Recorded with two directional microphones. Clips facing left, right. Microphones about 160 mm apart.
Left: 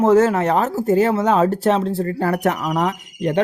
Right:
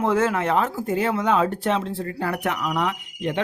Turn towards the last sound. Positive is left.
turn(degrees=40)  # may be behind; listen again after turning